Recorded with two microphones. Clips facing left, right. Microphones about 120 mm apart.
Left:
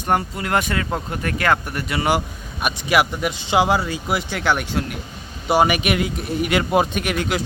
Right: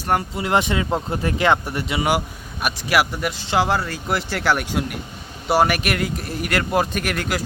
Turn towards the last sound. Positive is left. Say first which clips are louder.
# left 2 dB
turn(degrees=0)  # may be behind; listen again after turning